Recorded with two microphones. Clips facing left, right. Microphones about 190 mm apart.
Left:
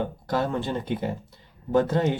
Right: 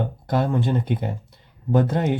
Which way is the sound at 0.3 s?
20° right (ahead or behind).